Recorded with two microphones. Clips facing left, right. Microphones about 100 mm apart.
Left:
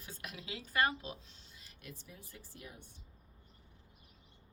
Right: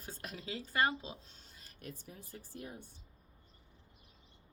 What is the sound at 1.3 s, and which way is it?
Speech, 45° right (ahead or behind).